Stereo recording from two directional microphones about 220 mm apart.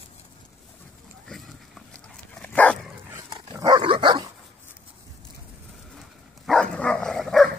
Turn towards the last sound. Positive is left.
turn(degrees=0)  # may be behind; listen again after turning